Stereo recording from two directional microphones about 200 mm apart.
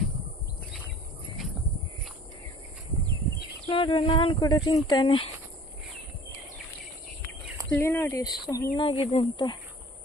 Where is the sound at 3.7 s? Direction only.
25° left (ahead or behind).